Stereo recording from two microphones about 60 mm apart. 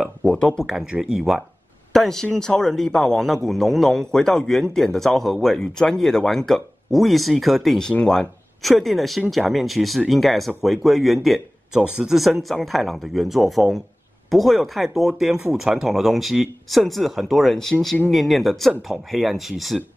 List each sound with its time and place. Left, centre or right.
0.2 s speech: centre
1.0 s a man's voice: centre
1.9 s a man's voice: centre